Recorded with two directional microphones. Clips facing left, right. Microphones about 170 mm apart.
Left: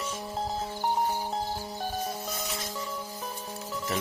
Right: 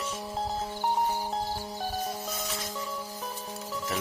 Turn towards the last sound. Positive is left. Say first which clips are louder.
# left 1 dB
turn(degrees=0)  # may be behind; listen again after turning